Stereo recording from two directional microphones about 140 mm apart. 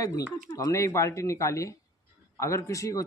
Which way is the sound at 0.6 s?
20° left (ahead or behind).